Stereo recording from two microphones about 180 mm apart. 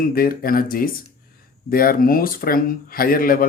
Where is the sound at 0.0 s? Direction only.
55° left (ahead or behind).